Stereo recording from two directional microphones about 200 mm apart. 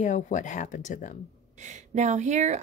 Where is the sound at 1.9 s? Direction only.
35° right (ahead or behind).